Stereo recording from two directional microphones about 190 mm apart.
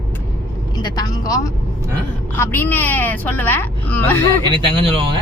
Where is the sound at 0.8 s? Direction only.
20° left (ahead or behind).